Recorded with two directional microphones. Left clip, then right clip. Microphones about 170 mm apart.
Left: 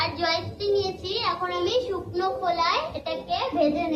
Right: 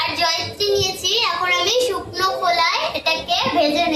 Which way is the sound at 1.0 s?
25° right (ahead or behind).